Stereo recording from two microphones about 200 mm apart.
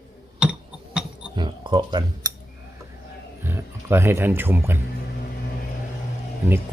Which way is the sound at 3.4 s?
10° right (ahead or behind).